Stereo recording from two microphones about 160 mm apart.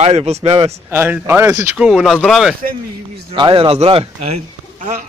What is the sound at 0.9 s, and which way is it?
Speech, 10° right (ahead or behind).